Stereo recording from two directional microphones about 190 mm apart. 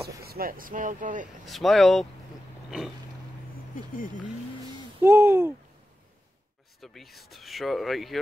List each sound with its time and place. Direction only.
0.0 s speech: 55° right (ahead or behind)
1.4 s speech: centre (ahead or behind)
3.7 s speech: 45° left (ahead or behind)
5.0 s speech: 15° right (ahead or behind)
6.8 s speech: centre (ahead or behind)